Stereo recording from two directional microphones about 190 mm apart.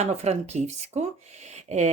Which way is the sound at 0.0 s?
35° right (ahead or behind).